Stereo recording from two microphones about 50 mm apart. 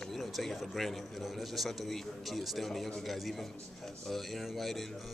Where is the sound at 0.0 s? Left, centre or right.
Centre.